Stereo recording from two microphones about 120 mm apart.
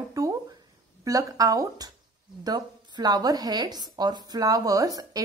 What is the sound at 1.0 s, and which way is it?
A woman's voice, 30° right (ahead or behind).